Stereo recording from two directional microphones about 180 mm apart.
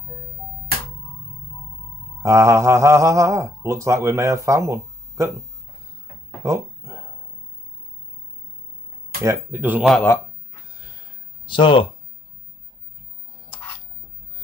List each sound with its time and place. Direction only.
2.2 s speech: 15° right (ahead or behind)
6.4 s a sound: 15° right (ahead or behind)
9.2 s speech: 15° right (ahead or behind)
11.4 s speech: 25° left (ahead or behind)